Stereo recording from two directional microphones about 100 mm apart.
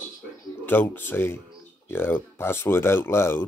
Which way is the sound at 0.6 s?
20° left (ahead or behind).